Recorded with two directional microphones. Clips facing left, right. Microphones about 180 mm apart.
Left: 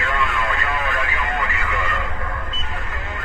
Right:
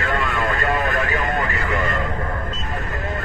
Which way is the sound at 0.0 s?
40° right (ahead or behind).